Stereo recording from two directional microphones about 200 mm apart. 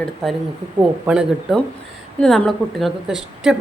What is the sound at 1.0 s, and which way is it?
A woman's voice, 5° right (ahead or behind).